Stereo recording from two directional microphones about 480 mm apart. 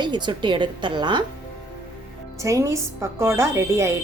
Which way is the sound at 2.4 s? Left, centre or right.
Centre.